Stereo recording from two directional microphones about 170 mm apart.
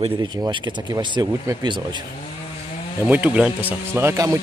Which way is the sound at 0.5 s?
25° right (ahead or behind).